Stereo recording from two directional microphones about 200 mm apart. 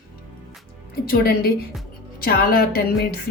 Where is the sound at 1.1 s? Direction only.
50° left (ahead or behind).